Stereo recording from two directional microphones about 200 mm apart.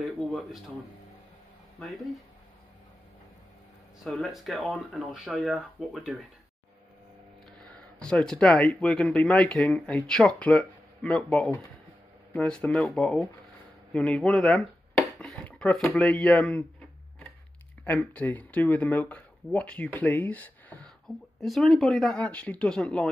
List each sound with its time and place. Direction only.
0.0 s speech: centre (ahead or behind)
1.8 s speech: centre (ahead or behind)
4.0 s speech: centre (ahead or behind)
7.6 s speech: 5° left (ahead or behind)
17.8 s speech: 10° left (ahead or behind)
20.0 s a sound: 10° left (ahead or behind)
21.4 s speech: centre (ahead or behind)